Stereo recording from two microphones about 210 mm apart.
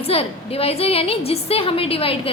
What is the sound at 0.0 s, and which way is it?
A woman's voice, 25° left (ahead or behind).